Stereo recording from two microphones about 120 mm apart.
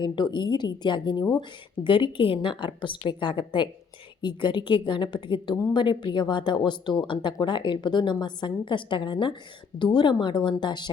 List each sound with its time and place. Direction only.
0.0 s a woman's voice: 40° left (ahead or behind)